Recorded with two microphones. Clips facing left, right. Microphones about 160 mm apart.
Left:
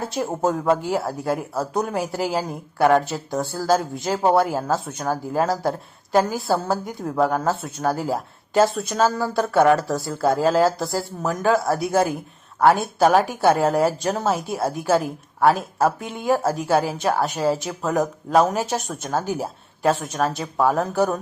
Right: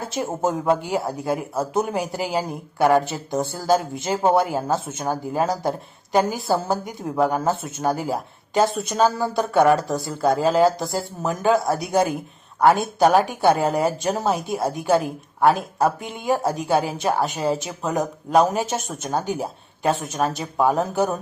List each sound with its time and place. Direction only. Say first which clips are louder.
0.0 s speech: left 1 dB; centre (ahead or behind)